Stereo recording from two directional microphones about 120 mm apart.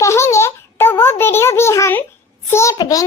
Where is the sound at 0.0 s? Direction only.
25° left (ahead or behind).